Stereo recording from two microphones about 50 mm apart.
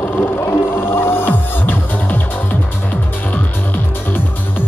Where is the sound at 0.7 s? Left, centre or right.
Left.